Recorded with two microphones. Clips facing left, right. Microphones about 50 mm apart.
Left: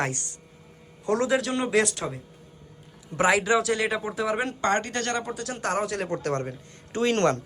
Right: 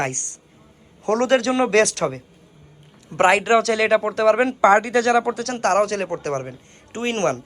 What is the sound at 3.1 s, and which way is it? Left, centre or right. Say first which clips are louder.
Speech: right 6 dB; right.